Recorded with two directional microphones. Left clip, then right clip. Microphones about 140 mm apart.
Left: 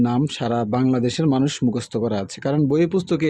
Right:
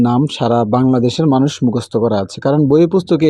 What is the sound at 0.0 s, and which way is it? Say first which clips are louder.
Speech: right 7 dB; 30° right (ahead or behind).